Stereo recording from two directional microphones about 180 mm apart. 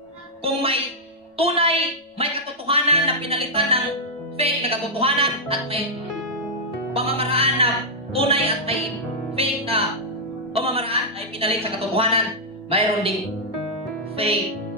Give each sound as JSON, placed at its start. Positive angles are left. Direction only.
{"t": 0.4, "sound": "music", "side_deg": -35}
{"t": 1.4, "sound": "a sound", "side_deg": -30}
{"t": 4.4, "sound": "music", "side_deg": -30}
{"t": 7.0, "sound": "music", "side_deg": -30}
{"t": 14.2, "sound": "music", "side_deg": -35}